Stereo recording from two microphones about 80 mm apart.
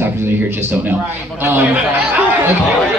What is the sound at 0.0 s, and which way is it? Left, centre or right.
Speech, right.